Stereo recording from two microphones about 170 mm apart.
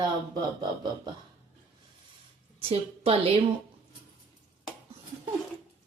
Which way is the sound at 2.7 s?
35° right (ahead or behind).